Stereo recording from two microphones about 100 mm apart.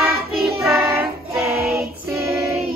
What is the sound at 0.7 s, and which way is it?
Child singing, 25° right (ahead or behind).